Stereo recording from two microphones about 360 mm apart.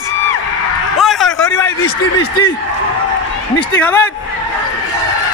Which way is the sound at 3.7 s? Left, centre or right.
Centre.